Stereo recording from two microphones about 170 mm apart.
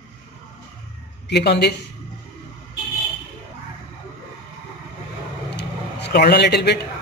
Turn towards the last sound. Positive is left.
turn(degrees=75)  # may be behind; listen again after turning